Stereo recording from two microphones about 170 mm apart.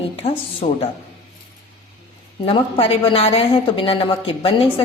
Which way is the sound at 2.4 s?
35° left (ahead or behind).